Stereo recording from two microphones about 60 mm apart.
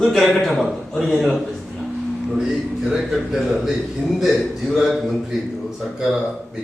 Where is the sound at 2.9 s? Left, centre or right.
Centre.